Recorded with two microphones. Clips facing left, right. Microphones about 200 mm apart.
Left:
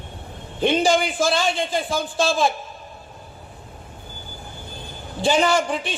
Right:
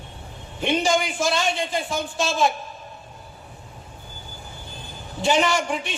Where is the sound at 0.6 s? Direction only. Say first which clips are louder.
Left 3 dB; 30° left (ahead or behind).